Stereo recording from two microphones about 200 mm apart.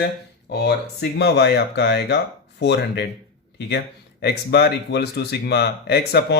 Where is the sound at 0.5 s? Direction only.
55° left (ahead or behind).